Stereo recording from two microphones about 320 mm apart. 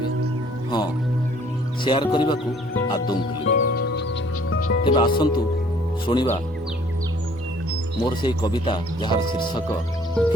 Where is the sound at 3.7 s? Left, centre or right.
Left.